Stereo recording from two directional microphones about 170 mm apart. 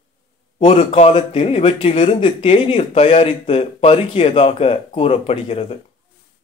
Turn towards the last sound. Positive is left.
turn(degrees=35)  # may be behind; listen again after turning